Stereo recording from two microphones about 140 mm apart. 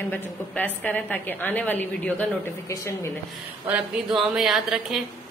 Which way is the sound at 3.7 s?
5° right (ahead or behind).